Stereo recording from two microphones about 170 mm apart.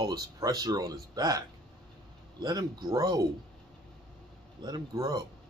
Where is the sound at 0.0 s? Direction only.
20° right (ahead or behind).